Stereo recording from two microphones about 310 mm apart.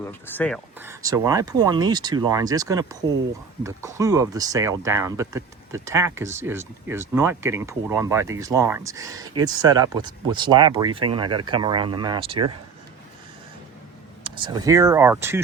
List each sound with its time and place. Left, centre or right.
0.0 s speech: centre
0.8 s speech: centre
14.3 s speech: centre